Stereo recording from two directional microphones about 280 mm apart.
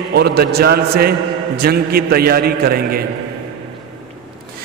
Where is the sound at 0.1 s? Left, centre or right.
Right.